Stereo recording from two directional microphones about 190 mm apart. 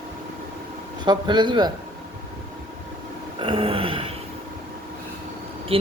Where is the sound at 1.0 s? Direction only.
25° right (ahead or behind).